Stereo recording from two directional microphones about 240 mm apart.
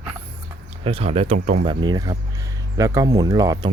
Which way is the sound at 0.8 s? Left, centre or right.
Right.